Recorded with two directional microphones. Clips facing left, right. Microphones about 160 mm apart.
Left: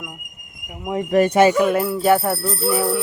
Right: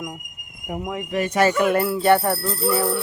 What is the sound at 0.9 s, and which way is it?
Speech, 40° left (ahead or behind).